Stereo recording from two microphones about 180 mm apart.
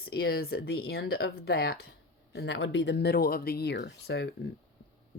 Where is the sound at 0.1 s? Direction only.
60° left (ahead or behind).